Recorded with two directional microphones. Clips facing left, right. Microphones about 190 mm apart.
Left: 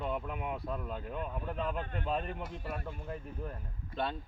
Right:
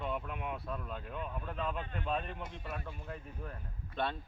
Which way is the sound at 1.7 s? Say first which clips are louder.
Left 3 dB; 50° left (ahead or behind).